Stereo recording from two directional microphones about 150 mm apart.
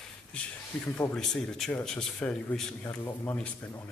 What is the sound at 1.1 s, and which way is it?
Speech, 5° left (ahead or behind).